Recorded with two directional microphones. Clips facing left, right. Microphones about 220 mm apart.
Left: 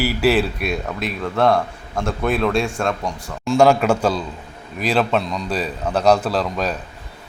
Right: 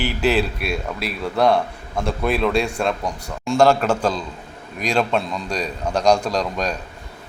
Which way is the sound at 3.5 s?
10° left (ahead or behind).